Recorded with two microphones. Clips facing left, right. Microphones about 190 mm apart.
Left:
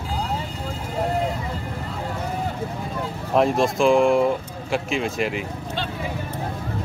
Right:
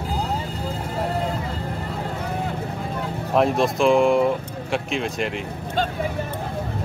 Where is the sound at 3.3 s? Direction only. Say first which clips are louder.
Even; centre (ahead or behind).